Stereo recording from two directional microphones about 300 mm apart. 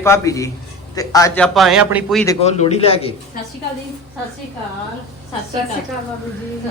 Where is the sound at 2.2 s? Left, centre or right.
Left.